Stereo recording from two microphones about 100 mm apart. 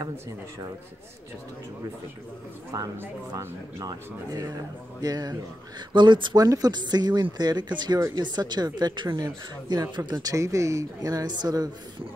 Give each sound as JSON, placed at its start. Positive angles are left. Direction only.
{"t": 3.0, "sound": "speech", "side_deg": -30}
{"t": 5.9, "sound": "speech", "side_deg": -50}
{"t": 6.4, "sound": "speech", "side_deg": -40}